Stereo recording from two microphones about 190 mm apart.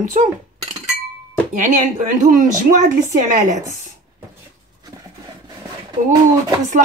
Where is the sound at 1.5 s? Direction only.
45° right (ahead or behind).